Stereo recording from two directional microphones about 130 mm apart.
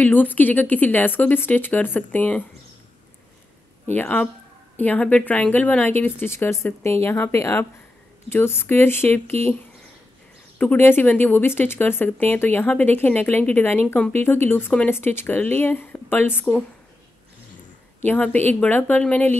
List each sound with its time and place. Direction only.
0.0 s speech: 15° left (ahead or behind)
3.8 s speech: 15° left (ahead or behind)
18.0 s speech: 15° left (ahead or behind)